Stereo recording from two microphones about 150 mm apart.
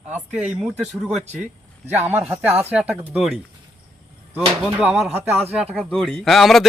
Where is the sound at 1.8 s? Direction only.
15° right (ahead or behind).